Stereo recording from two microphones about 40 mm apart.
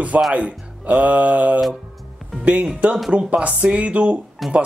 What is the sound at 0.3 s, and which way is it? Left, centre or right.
Speech, right.